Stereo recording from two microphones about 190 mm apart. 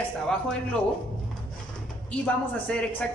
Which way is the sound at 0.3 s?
5° left (ahead or behind).